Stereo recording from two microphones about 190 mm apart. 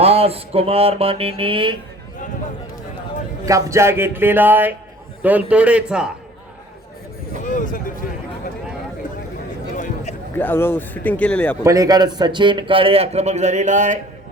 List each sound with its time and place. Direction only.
0.0 s mantra: 30° right (ahead or behind)
3.4 s speech: 15° right (ahead or behind)
7.4 s a sound: 45° left (ahead or behind)
9.7 s a sound: 40° left (ahead or behind)
10.3 s speech: 10° left (ahead or behind)
11.6 s a man's voice: 15° right (ahead or behind); by 14.0 s 40° right (ahead or behind)